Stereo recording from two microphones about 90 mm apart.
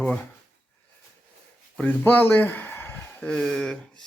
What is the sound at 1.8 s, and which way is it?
Speech, 20° left (ahead or behind).